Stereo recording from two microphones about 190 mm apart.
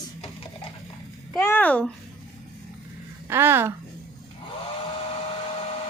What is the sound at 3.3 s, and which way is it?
Speech, 10° right (ahead or behind).